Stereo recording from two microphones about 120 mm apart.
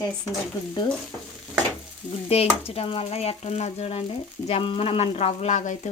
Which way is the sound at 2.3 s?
55° left (ahead or behind).